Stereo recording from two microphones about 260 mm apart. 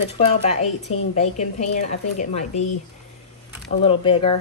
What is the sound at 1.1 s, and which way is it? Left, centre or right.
Speech, left.